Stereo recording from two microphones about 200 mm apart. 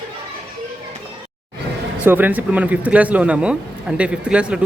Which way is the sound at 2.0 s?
10° right (ahead or behind).